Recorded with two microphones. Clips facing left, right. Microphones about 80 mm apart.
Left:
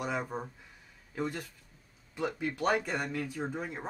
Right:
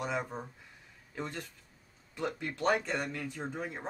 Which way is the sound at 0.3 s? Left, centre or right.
Centre.